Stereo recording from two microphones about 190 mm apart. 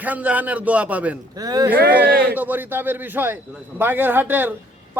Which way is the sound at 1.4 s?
20° right (ahead or behind).